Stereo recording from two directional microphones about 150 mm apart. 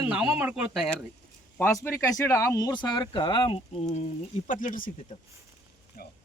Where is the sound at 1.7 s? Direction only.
15° left (ahead or behind); by 4.0 s 45° left (ahead or behind).